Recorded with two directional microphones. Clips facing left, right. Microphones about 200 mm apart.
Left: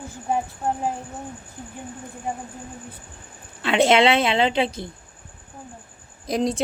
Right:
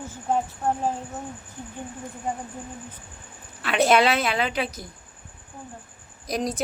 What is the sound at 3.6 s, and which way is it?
A woman's voice, 25° left (ahead or behind).